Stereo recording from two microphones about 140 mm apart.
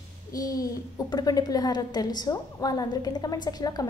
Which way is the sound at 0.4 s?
25° left (ahead or behind).